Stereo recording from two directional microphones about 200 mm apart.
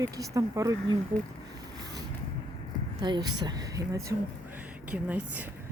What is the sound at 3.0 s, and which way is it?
Speech, 20° right (ahead or behind).